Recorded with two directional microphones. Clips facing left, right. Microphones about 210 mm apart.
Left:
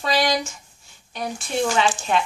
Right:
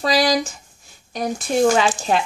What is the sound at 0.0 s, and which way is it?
Speech, 35° right (ahead or behind).